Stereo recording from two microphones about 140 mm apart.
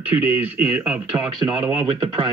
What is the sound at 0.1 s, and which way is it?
Speech, 10° right (ahead or behind).